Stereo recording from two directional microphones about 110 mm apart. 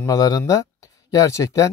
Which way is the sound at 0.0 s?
30° left (ahead or behind).